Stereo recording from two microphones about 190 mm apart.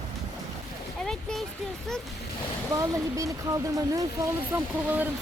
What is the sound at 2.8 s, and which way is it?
Speech, 15° right (ahead or behind).